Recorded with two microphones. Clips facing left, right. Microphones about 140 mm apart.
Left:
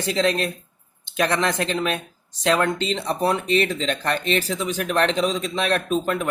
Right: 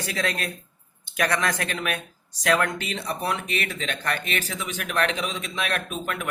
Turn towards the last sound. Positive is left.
turn(degrees=30)  # may be behind; listen again after turning